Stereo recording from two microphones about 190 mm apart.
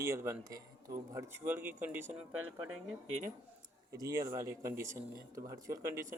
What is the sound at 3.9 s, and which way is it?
Speech, 15° right (ahead or behind).